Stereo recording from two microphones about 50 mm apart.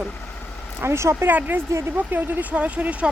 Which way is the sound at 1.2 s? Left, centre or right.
Right.